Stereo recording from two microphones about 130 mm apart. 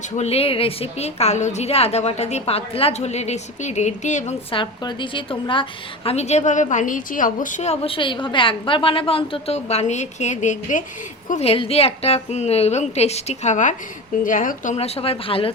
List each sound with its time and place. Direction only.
0.2 s a woman's voice: 50° left (ahead or behind); by 4.4 s 65° left (ahead or behind)
4.5 s a woman's voice: 35° left (ahead or behind)
6.1 s a woman's voice: 55° left (ahead or behind)
7.9 s a woman's voice: 40° left (ahead or behind); by 10.8 s 75° left (ahead or behind)
11.3 s a woman's voice: 55° left (ahead or behind); by 13.7 s 70° left (ahead or behind)
14.3 s speech: 90° left
14.8 s a woman's voice: 50° left (ahead or behind)